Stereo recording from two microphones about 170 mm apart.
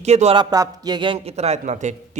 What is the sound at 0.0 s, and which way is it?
Speech, 40° right (ahead or behind).